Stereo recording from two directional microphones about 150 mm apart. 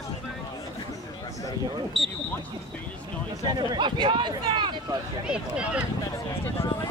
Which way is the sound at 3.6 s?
30° right (ahead or behind).